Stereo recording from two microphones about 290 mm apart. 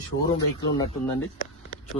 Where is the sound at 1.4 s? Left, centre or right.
Left.